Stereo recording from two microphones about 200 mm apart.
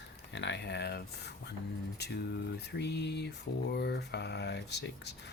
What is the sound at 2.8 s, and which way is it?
Speech, 55° left (ahead or behind).